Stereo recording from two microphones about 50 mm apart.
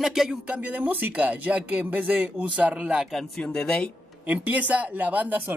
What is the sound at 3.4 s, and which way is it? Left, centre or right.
Speech, centre.